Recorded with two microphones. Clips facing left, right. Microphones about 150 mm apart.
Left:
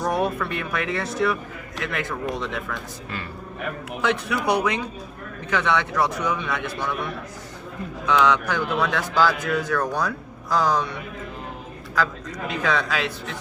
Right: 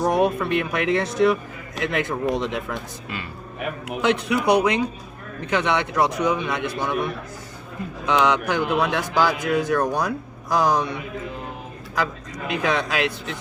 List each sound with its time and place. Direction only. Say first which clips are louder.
0.0 s speech: right 4 dB; 20° right (ahead or behind)
8.0 s speech: even; 20° right (ahead or behind)
12.5 s speech: right 1 dB; 15° right (ahead or behind)